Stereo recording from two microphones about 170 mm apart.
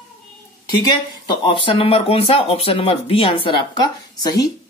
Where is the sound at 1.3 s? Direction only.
30° left (ahead or behind).